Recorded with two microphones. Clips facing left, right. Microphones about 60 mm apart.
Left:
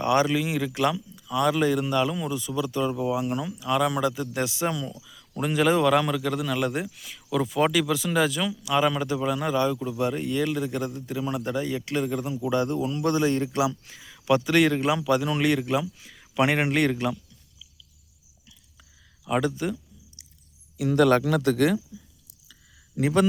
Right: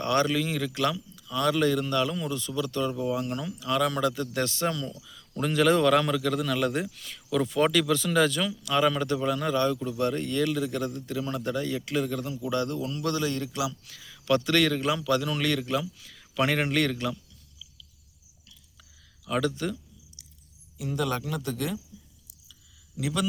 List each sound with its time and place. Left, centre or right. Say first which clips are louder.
0.0 s a man's voice: left 3 dB; centre
19.2 s speech: left 2 dB; centre
20.7 s speech: left 10 dB; left
23.0 s a man's voice: left 8 dB; left